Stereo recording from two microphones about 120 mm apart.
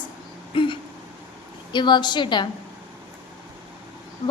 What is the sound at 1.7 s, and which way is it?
Speech, 40° left (ahead or behind).